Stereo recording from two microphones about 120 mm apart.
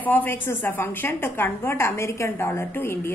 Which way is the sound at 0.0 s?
15° left (ahead or behind).